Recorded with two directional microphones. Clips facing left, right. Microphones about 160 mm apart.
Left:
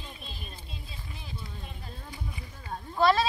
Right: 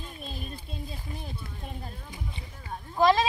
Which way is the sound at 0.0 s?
45° right (ahead or behind).